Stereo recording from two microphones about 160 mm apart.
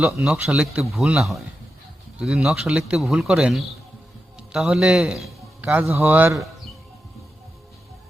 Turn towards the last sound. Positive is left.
turn(degrees=-15)  # may be behind; listen again after turning